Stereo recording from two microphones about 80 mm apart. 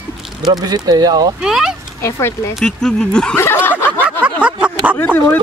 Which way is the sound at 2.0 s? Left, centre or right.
Left.